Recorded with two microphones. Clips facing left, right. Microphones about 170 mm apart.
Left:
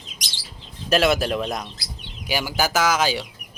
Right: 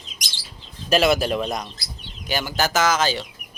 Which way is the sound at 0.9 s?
Centre (ahead or behind).